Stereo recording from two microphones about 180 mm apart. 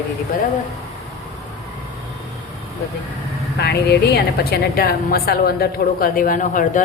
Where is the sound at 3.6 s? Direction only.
65° left (ahead or behind).